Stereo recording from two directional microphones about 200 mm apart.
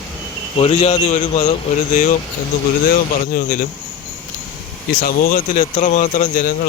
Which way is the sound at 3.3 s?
45° left (ahead or behind).